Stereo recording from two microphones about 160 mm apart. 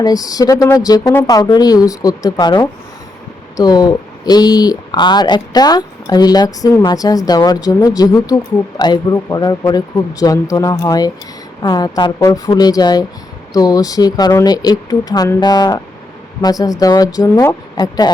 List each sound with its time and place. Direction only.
0.0 s speech: 25° left (ahead or behind)